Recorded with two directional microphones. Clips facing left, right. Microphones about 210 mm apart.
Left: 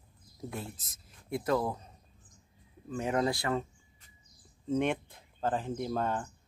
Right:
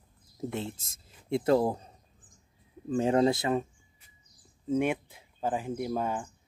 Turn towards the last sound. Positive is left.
turn(degrees=-10)  # may be behind; listen again after turning